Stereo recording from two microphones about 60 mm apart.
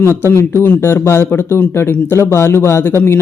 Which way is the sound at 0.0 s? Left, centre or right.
Left.